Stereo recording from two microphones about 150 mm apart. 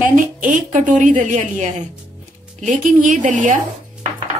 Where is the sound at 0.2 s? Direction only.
60° right (ahead or behind).